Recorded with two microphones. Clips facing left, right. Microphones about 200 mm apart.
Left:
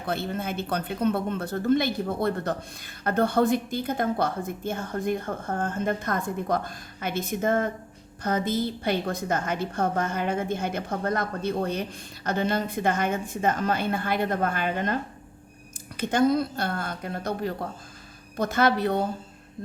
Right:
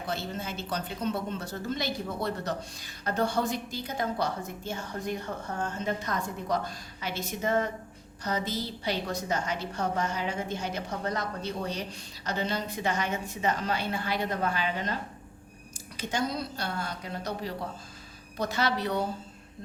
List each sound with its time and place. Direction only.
0.0 s speech: 55° left (ahead or behind)
16.0 s speech: 55° left (ahead or behind)